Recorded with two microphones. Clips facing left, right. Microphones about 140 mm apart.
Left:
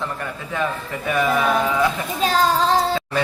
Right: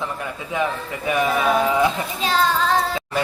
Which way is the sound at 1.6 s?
20° right (ahead or behind).